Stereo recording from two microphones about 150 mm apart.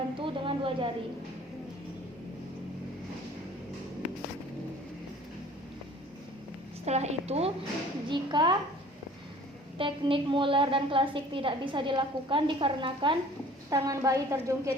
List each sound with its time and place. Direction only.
0.2 s a sound: 35° right (ahead or behind)
6.8 s a woman's voice: 45° right (ahead or behind)
8.1 s a woman's voice: 30° right (ahead or behind)
9.7 s a woman's voice: 35° right (ahead or behind)
13.7 s a woman's voice: 20° right (ahead or behind)